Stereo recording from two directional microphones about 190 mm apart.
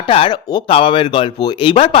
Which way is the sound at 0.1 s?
25° left (ahead or behind).